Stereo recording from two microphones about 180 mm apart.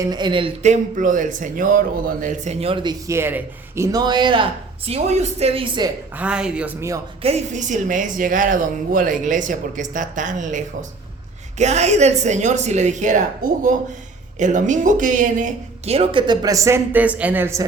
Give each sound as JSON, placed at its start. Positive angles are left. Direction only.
{"t": 0.0, "sound": "speech", "side_deg": -25}
{"t": 3.1, "sound": "speech", "side_deg": -15}
{"t": 4.9, "sound": "speech", "side_deg": -35}
{"t": 6.1, "sound": "speech", "side_deg": -5}
{"t": 7.2, "sound": "speech", "side_deg": -35}